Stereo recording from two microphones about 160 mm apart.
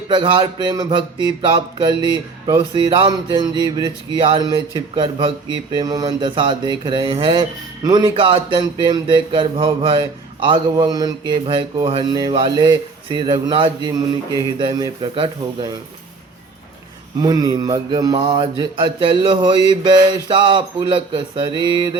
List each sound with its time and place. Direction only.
0.1 s a man's voice: 30° right (ahead or behind)
4.9 s mantra: 30° right (ahead or behind)
5.7 s a man's voice: 25° right (ahead or behind)
7.9 s mantra: 25° right (ahead or behind)
10.8 s a man's voice: 25° right (ahead or behind)
17.2 s a man's voice: 25° right (ahead or behind)
18.2 s mantra: 30° right (ahead or behind)